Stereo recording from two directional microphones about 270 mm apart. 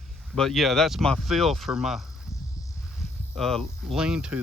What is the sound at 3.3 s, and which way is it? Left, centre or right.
Speech, centre.